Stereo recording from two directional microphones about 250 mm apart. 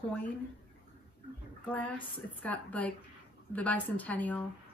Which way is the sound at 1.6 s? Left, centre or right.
Centre.